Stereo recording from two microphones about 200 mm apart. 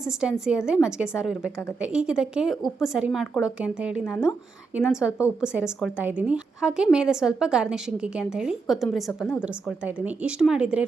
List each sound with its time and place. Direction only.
0.0 s a woman's voice: 5° right (ahead or behind)